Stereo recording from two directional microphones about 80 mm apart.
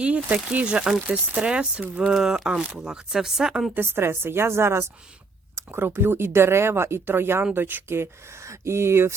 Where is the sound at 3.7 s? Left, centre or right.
Right.